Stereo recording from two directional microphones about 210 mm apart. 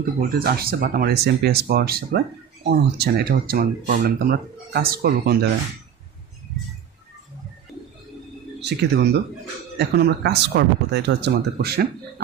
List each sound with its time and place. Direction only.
0.3 s speech: 45° right (ahead or behind)
8.6 s speech: 50° right (ahead or behind)